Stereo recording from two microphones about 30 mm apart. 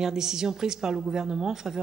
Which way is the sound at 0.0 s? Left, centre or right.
Centre.